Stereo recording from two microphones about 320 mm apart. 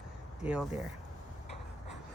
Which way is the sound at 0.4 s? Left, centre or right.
Centre.